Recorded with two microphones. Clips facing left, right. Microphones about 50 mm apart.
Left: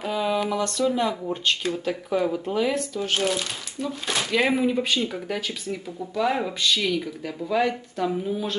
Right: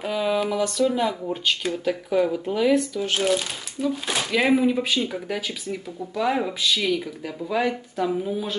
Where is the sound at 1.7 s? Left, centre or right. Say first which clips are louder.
Right 1 dB; centre.